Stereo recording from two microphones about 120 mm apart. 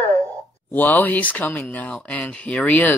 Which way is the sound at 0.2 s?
15° left (ahead or behind).